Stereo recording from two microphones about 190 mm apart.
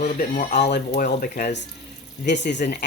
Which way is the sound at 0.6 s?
65° left (ahead or behind).